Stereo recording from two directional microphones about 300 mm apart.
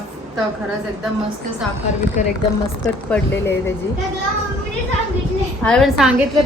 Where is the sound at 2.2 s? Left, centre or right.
Left.